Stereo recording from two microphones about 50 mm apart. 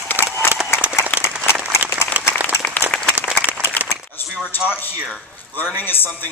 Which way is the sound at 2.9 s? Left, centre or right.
Left.